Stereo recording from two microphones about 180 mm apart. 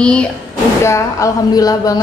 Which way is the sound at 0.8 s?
15° left (ahead or behind).